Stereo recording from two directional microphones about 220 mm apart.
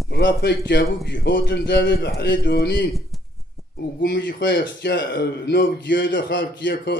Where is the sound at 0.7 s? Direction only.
50° left (ahead or behind).